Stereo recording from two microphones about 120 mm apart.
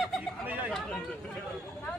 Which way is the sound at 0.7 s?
5° left (ahead or behind).